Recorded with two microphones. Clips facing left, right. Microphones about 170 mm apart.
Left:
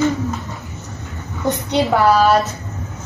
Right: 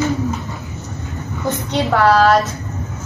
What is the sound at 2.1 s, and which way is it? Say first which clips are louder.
Speech: right 1 dB; 10° left (ahead or behind).